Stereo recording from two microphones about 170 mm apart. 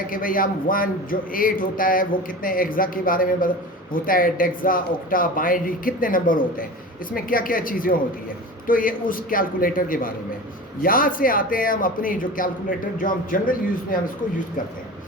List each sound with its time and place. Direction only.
0.1 s a man's voice: 55° left (ahead or behind)